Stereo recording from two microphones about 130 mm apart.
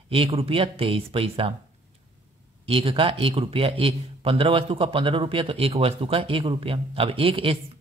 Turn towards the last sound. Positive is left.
turn(degrees=-45)  # may be behind; listen again after turning